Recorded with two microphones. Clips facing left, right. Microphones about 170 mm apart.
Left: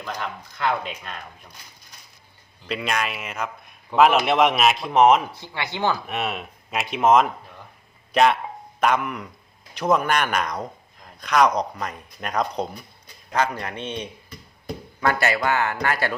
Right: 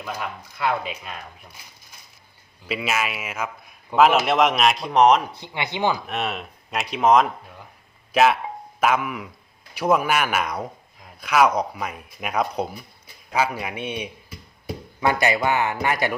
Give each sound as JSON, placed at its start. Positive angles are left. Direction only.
{"t": 0.0, "sound": "a man's voice", "side_deg": -5}
{"t": 2.6, "sound": "a man's voice", "side_deg": -5}
{"t": 5.3, "sound": "speech", "side_deg": -20}
{"t": 6.1, "sound": "a man's voice", "side_deg": 0}